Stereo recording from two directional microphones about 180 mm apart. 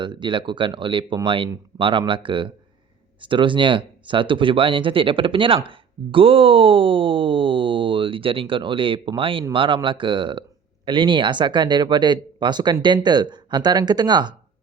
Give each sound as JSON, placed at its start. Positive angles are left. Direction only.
{"t": 0.0, "sound": "speech", "side_deg": -25}